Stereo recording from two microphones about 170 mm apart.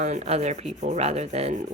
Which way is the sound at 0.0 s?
40° right (ahead or behind).